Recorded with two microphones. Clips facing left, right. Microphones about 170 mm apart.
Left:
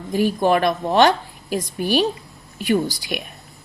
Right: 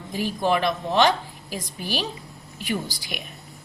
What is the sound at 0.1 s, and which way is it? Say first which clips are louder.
Speech: left 6 dB; 55° left (ahead or behind).